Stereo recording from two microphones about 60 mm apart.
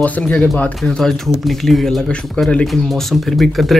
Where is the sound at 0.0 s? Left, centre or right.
Left.